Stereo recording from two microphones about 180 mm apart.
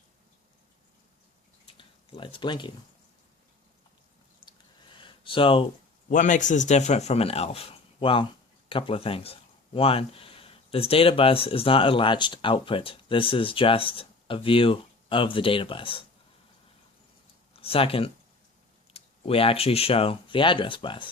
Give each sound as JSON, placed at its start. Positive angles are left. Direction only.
{"t": 1.8, "sound": "speech", "side_deg": 30}
{"t": 4.4, "sound": "a sound", "side_deg": 25}
{"t": 6.1, "sound": "speech", "side_deg": 45}
{"t": 17.5, "sound": "speech", "side_deg": 30}